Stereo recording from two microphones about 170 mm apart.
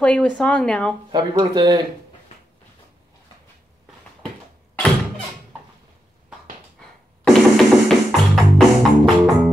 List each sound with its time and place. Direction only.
0.0 s speech: 5° left (ahead or behind)
1.1 s speech: 25° right (ahead or behind)
7.2 s music: centre (ahead or behind)